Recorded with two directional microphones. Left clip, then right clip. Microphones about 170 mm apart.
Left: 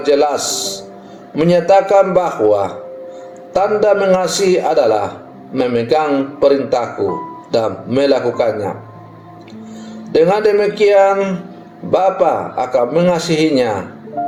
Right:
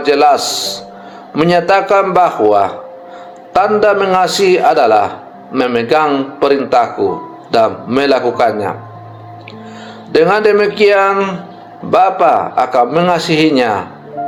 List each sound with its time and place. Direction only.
0.0 s a man's voice: 20° right (ahead or behind)
10.1 s a man's voice: 20° right (ahead or behind)